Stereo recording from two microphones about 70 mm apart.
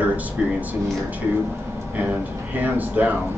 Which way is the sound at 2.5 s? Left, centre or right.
Right.